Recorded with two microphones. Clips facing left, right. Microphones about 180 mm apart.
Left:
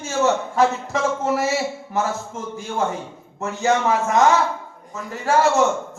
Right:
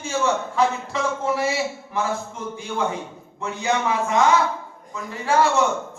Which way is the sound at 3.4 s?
45° left (ahead or behind).